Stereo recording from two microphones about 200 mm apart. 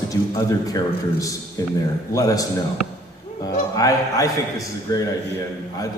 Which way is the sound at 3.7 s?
15° left (ahead or behind).